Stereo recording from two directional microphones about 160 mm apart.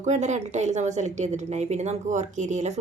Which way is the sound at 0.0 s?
45° right (ahead or behind).